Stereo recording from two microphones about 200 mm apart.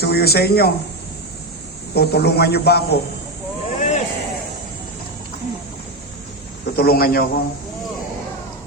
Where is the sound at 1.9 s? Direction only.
55° left (ahead or behind).